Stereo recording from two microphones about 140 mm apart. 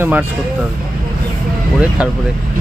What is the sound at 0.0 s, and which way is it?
Speech, 10° right (ahead or behind).